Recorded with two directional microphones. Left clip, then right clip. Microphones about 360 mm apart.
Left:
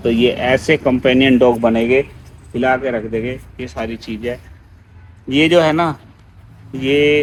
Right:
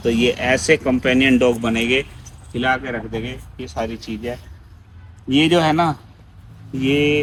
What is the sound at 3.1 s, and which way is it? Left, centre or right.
Speech, right.